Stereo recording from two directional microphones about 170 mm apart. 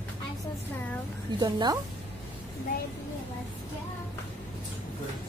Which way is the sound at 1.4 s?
25° right (ahead or behind).